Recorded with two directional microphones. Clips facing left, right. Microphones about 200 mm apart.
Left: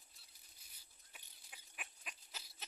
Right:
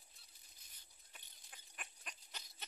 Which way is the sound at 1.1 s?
5° left (ahead or behind).